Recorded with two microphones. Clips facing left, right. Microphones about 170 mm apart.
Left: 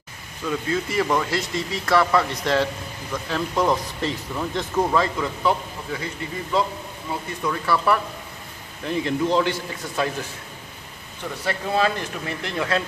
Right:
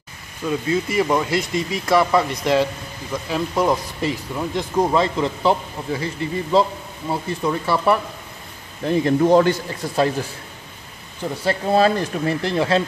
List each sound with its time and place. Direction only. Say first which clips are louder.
0.5 s speech: right 3 dB; 15° right (ahead or behind)
8.8 s a man's voice: right 6 dB; 45° right (ahead or behind)
11.2 s speech: right 6 dB; 35° right (ahead or behind)